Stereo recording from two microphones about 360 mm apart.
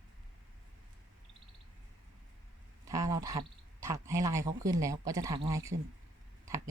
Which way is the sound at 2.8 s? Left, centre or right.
Centre.